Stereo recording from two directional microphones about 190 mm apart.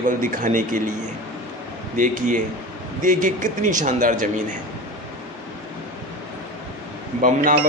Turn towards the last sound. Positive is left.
turn(degrees=-45)  # may be behind; listen again after turning